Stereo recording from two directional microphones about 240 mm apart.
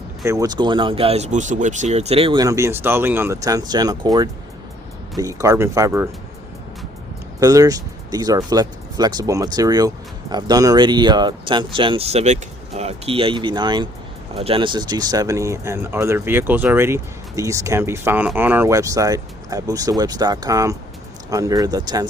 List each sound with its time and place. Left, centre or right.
0.3 s speech: centre
7.3 s speech: centre